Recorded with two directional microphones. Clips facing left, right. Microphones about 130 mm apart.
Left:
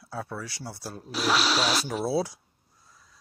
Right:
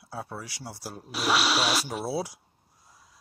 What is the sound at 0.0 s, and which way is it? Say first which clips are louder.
Speech: left 2 dB; 15° right (ahead or behind).